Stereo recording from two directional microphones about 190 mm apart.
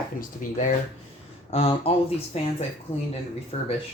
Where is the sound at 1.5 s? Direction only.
30° left (ahead or behind).